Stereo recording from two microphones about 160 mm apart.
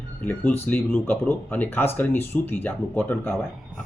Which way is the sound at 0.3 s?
15° left (ahead or behind).